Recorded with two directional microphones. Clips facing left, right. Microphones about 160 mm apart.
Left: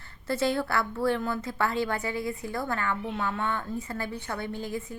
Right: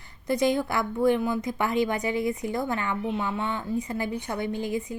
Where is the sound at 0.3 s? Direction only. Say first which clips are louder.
Right 3 dB; 15° right (ahead or behind).